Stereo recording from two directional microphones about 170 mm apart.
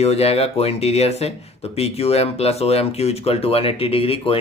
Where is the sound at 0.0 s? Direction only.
40° left (ahead or behind).